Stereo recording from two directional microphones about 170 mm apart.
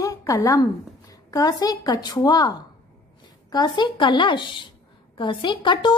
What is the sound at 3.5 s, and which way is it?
A woman's voice, 25° left (ahead or behind).